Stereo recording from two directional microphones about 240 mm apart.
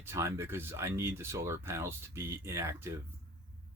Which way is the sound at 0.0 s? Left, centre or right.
Centre.